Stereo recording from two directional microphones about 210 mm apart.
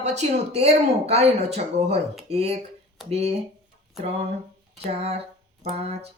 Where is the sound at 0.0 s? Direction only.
30° right (ahead or behind).